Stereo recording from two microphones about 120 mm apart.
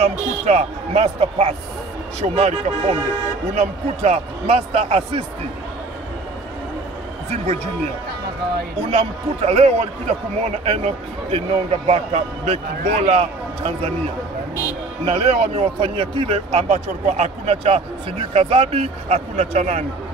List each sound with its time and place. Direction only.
0.0 s a man's voice: 70° right (ahead or behind)
8.9 s a man's voice: 60° right (ahead or behind)
15.0 s a man's voice: 55° right (ahead or behind)